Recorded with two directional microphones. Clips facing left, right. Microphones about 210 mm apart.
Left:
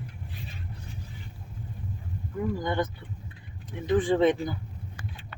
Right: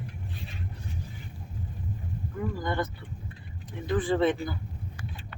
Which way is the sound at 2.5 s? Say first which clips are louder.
Left 2 dB; 20° left (ahead or behind).